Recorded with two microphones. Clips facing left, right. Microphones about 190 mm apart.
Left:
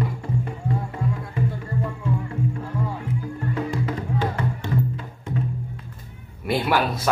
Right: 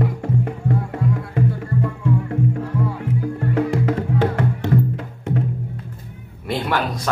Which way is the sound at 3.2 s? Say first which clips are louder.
Right 9 dB; 65° right (ahead or behind).